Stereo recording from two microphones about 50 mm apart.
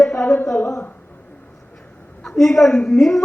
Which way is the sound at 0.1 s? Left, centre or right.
Left.